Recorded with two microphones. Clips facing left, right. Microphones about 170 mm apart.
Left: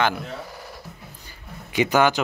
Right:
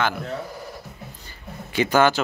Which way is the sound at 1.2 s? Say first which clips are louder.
Right 3 dB; 15° left (ahead or behind).